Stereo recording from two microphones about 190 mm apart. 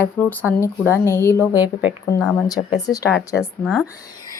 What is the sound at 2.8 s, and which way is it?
Speech, 20° left (ahead or behind).